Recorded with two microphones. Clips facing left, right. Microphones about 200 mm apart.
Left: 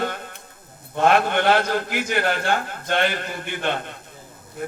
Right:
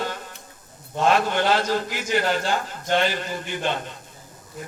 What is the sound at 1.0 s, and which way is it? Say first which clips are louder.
A man's voice: left 2 dB; 60° left (ahead or behind).